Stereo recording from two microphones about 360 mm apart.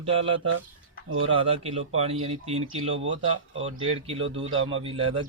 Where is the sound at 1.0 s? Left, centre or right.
Right.